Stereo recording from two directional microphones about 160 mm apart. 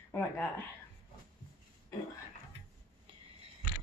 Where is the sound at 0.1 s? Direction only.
10° left (ahead or behind).